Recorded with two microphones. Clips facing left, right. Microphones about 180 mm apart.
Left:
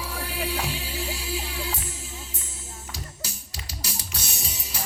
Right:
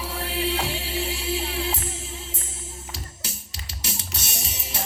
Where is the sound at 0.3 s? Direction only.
25° right (ahead or behind).